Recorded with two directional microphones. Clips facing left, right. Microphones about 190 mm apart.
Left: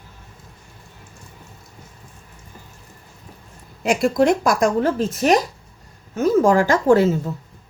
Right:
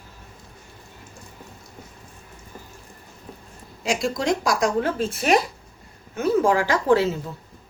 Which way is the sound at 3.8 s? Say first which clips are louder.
Left 7 dB; 55° left (ahead or behind).